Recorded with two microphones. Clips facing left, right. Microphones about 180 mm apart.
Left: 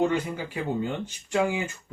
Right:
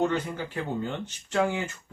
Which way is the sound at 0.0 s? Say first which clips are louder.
Left 2 dB; 10° left (ahead or behind).